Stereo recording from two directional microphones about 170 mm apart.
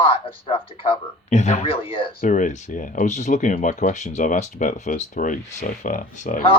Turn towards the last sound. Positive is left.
turn(degrees=50)  # may be behind; listen again after turning